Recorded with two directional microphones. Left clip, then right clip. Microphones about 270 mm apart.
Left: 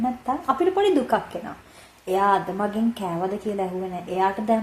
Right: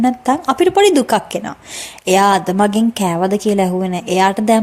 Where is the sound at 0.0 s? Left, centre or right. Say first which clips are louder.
Right 10 dB; right.